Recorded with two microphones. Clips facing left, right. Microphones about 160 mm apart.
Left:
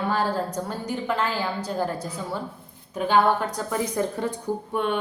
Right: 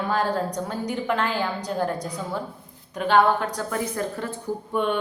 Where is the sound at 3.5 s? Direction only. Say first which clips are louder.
Left 1 dB; 15° left (ahead or behind).